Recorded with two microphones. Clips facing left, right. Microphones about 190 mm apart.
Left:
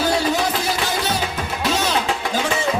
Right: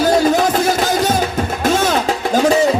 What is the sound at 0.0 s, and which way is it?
Music, 45° right (ahead or behind).